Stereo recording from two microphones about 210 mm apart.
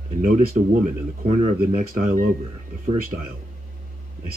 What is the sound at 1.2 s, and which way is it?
Speech, 35° right (ahead or behind).